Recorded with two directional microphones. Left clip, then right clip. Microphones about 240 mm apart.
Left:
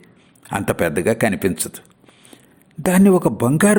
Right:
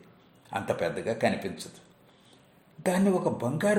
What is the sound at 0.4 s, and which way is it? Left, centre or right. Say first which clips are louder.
A man's voice: left 9 dB; left.